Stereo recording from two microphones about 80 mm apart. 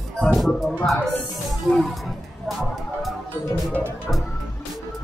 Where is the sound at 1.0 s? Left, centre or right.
Left.